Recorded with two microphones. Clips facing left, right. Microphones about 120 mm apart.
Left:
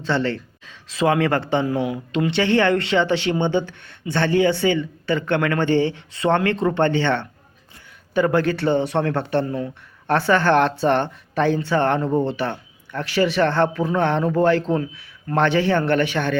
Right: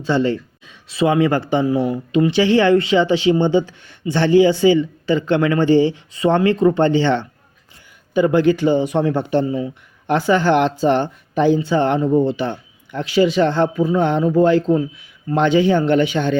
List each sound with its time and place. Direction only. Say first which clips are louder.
0.0 s speech: right 4 dB; 15° right (ahead or behind)